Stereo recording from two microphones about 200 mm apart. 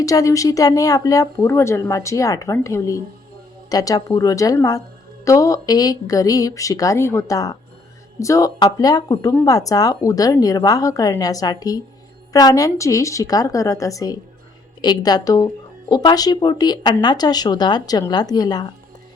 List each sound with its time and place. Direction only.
0.0 s speech: 15° left (ahead or behind)